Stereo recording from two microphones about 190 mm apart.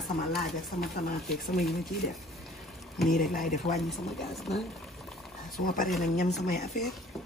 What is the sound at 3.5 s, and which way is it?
Speech, 35° left (ahead or behind).